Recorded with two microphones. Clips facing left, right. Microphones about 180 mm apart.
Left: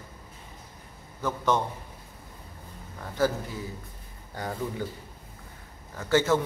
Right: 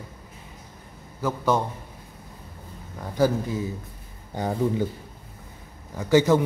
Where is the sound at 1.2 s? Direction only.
10° right (ahead or behind).